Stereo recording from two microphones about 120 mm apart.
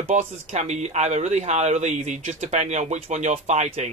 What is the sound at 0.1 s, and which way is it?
Speech, 75° right (ahead or behind).